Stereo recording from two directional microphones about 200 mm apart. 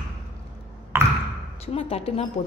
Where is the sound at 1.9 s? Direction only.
30° left (ahead or behind).